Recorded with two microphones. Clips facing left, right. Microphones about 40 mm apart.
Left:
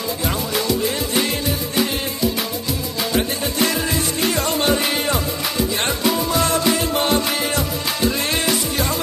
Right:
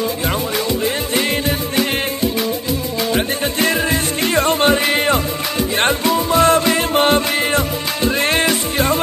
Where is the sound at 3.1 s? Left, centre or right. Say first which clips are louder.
Right 2 dB; right.